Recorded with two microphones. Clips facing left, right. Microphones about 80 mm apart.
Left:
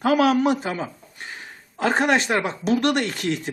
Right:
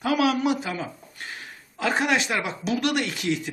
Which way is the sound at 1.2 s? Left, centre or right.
Left.